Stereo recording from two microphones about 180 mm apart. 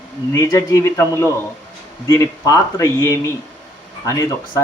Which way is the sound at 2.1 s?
15° left (ahead or behind).